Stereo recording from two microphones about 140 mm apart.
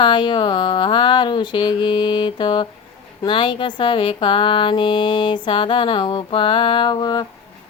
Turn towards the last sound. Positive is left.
turn(degrees=30)  # may be behind; listen again after turning